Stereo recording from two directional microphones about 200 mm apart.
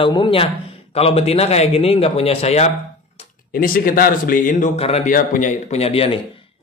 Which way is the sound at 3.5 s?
45° left (ahead or behind).